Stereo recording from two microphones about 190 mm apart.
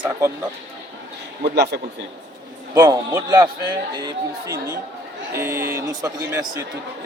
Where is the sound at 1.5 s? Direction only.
60° right (ahead or behind).